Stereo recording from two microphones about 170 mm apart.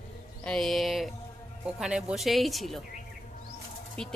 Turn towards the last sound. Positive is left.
turn(degrees=5)  # may be behind; listen again after turning